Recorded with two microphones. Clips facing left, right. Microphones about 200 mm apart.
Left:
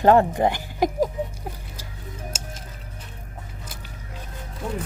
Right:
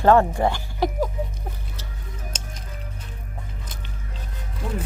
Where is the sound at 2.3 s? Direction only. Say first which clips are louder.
Left 1 dB; 5° left (ahead or behind).